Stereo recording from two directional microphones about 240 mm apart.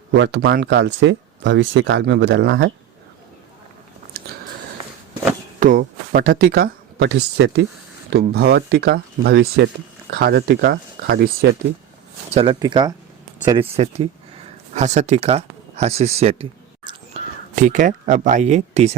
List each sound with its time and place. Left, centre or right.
0.1 s speech: right
5.5 s speech: right
12.3 s speech: right